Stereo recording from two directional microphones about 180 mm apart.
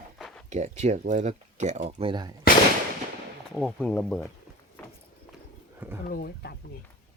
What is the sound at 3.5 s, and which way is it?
Speech, centre (ahead or behind).